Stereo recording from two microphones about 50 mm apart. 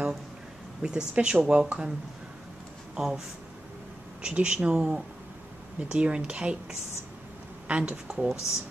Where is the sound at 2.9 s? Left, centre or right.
Centre.